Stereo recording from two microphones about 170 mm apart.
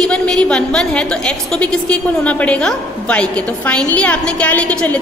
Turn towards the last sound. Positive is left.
turn(degrees=10)  # may be behind; listen again after turning